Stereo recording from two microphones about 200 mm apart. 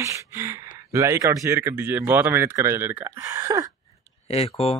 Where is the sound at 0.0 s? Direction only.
15° right (ahead or behind).